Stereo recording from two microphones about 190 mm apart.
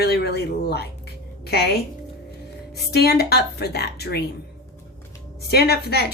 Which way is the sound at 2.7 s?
55° left (ahead or behind).